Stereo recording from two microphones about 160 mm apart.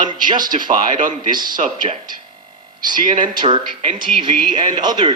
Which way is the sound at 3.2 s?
30° right (ahead or behind).